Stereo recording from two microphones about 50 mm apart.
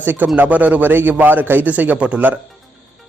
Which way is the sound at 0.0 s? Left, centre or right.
Right.